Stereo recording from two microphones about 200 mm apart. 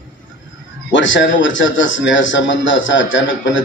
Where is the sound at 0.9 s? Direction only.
70° left (ahead or behind).